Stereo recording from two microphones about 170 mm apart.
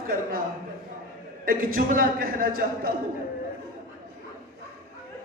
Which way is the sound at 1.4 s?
55° right (ahead or behind).